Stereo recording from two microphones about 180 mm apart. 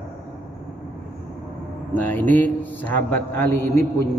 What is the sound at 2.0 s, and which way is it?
A man's voice, 10° left (ahead or behind).